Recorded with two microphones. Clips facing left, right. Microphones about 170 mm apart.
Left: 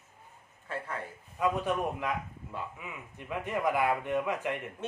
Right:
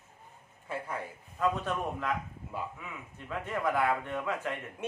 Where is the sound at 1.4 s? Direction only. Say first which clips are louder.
Left 2 dB; 15° left (ahead or behind).